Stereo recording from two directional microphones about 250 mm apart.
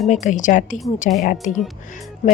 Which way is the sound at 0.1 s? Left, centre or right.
Left.